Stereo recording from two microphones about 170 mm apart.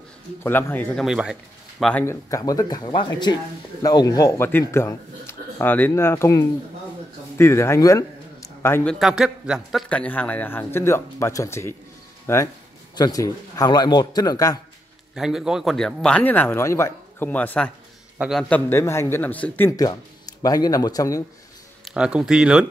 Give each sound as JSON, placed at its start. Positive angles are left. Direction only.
{"t": 0.4, "sound": "a man's voice", "side_deg": 15}
{"t": 1.0, "sound": "speech", "side_deg": -5}
{"t": 2.0, "sound": "a man's voice", "side_deg": 20}
{"t": 9.0, "sound": "a man's voice", "side_deg": -5}
{"t": 15.1, "sound": "a man's voice", "side_deg": -5}
{"t": 19.8, "sound": "speech", "side_deg": 20}
{"t": 21.8, "sound": "speech", "side_deg": -5}